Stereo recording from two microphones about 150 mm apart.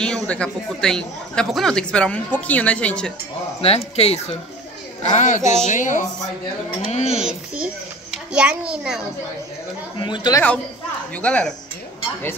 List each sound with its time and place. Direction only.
0.0 s speech: 5° left (ahead or behind)
3.6 s a woman's voice: 40° left (ahead or behind); by 6.0 s 60° left (ahead or behind)
6.8 s speech: 45° left (ahead or behind)
7.2 s a child's voice: 5° right (ahead or behind)
9.9 s speech: 30° left (ahead or behind)
11.1 s speech: 10° left (ahead or behind)